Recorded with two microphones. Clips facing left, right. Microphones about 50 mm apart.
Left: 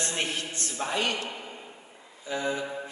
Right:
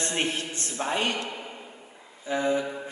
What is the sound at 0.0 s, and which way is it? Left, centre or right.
A man's voice, right.